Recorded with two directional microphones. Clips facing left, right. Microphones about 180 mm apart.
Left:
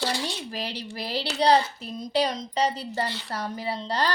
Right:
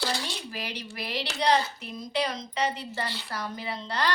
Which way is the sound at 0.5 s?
35° left (ahead or behind).